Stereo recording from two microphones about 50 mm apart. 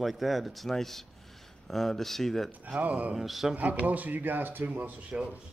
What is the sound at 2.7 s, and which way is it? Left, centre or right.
Speech, right.